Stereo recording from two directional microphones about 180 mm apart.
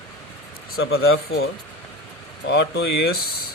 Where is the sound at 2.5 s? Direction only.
70° left (ahead or behind).